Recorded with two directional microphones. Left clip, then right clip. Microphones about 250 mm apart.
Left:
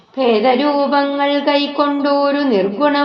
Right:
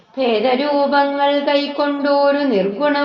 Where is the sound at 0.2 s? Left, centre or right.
Left.